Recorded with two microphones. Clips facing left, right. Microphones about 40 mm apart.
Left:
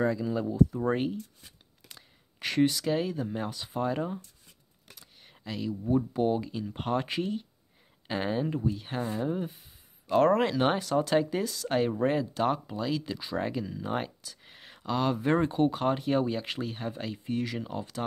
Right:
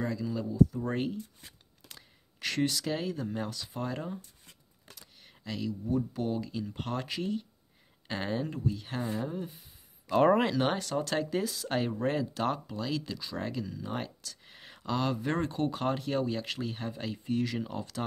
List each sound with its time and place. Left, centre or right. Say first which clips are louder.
0.0 s speech: left 5 dB; left
2.3 s speech: left 4 dB; centre
4.9 s a sound: left 1 dB; centre
5.7 s speech: left 4 dB; left
8.1 s speech: left 4 dB; centre
9.2 s speech: left 5 dB; left
10.4 s speech: left 3 dB; centre
11.4 s speech: left 4 dB; centre